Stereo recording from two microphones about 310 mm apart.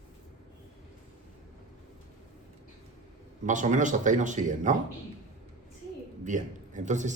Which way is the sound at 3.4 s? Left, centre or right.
Right.